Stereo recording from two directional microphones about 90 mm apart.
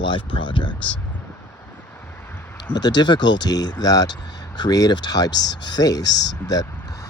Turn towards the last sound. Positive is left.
turn(degrees=45)  # may be behind; listen again after turning